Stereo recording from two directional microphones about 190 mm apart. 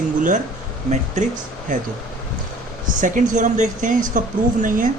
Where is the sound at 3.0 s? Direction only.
40° right (ahead or behind).